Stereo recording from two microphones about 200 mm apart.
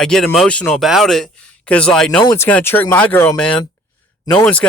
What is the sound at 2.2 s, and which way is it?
Speech, 20° left (ahead or behind).